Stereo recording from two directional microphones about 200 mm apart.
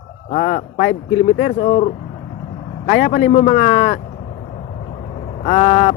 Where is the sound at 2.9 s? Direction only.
35° left (ahead or behind).